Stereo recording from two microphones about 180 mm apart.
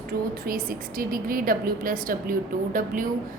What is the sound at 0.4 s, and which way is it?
Speech, 50° right (ahead or behind).